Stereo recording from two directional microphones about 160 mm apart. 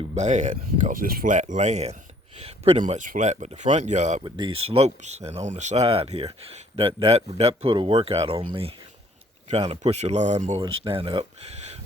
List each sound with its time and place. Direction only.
0.0 s a sound: 35° right (ahead or behind)
0.3 s speech: 50° right (ahead or behind)
2.8 s speech: 55° right (ahead or behind)
4.2 s speech: 30° right (ahead or behind); by 10.6 s 45° right (ahead or behind)
10.6 s speech: 30° right (ahead or behind)